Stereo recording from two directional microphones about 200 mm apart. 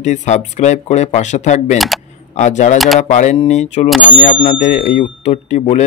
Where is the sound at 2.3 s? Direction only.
35° left (ahead or behind).